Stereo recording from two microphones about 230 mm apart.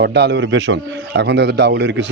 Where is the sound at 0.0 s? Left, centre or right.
Right.